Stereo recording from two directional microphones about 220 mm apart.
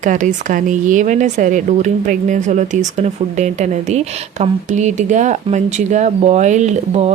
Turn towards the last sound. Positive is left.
turn(degrees=-30)  # may be behind; listen again after turning